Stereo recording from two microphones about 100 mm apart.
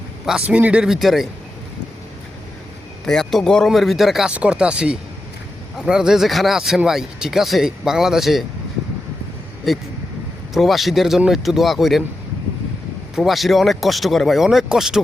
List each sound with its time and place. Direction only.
0.3 s a man's voice: 10° right (ahead or behind)
3.1 s speech: 5° left (ahead or behind)
9.7 s speech: centre (ahead or behind)
13.1 s speech: centre (ahead or behind)